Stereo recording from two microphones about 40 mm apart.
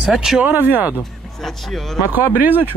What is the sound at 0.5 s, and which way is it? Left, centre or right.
Speech, right.